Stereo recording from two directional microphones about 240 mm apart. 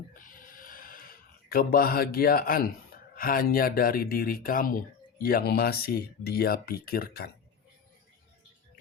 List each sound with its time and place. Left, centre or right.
0.1 s speech: left